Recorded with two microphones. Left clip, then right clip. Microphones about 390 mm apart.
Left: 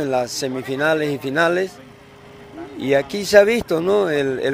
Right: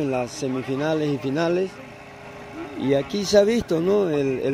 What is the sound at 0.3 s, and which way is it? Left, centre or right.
Speech, left.